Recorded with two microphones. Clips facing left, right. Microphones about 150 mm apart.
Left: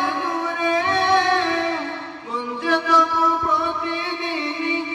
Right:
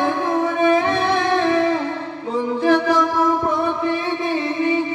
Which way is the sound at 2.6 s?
45° right (ahead or behind).